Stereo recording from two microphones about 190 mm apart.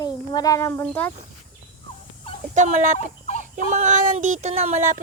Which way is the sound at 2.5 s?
40° right (ahead or behind).